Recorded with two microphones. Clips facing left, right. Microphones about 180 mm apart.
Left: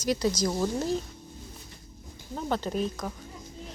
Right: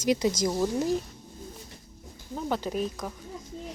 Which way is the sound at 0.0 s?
20° right (ahead or behind).